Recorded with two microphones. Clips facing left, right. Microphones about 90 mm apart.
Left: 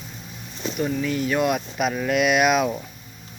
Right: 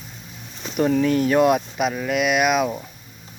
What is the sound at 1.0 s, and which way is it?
Speech, 40° right (ahead or behind).